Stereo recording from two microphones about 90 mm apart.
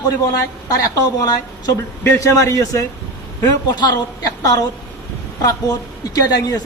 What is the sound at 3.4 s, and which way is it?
Speech, 50° left (ahead or behind).